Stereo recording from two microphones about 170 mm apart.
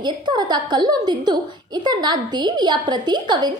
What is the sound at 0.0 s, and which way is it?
A woman's voice, 25° right (ahead or behind).